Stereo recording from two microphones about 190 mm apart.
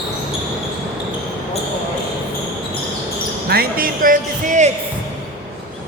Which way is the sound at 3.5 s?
50° right (ahead or behind).